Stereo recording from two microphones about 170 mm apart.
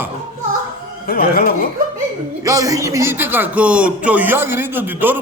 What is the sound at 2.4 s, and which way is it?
A man's voice, 20° right (ahead or behind).